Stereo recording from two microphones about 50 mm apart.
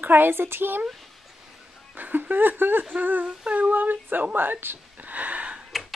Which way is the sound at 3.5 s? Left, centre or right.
Right.